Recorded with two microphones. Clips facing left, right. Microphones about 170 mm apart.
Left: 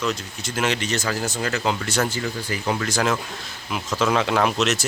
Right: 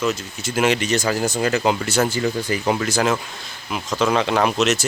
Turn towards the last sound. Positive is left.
turn(degrees=0)  # may be behind; listen again after turning